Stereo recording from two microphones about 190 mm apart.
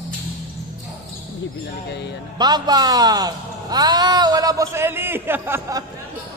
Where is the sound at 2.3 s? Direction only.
20° right (ahead or behind).